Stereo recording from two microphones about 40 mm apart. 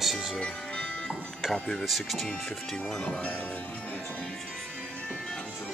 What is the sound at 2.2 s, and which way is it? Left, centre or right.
Speech, centre.